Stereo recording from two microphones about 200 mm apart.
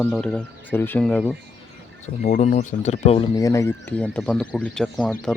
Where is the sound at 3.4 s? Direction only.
15° left (ahead or behind).